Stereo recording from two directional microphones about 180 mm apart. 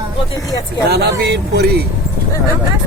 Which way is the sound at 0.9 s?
65° right (ahead or behind).